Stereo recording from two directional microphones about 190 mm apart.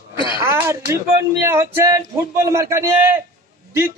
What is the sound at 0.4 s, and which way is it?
A man's voice, 15° right (ahead or behind).